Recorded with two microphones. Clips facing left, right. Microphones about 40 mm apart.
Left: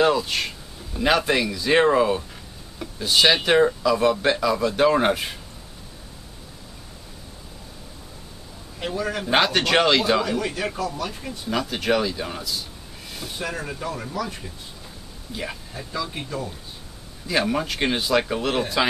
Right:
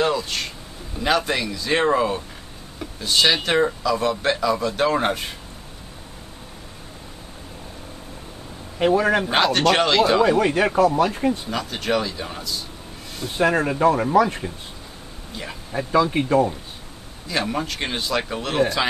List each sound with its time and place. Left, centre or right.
0.0 s a sound: centre
0.9 s speech: centre
8.7 s speech: right
9.3 s speech: centre
10.2 s speech: right
11.5 s speech: centre
13.4 s speech: right
15.9 s speech: right
17.3 s speech: centre